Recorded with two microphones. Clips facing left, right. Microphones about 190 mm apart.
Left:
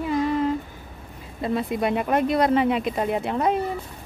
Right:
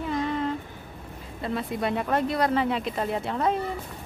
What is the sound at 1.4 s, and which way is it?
Speech, 15° left (ahead or behind).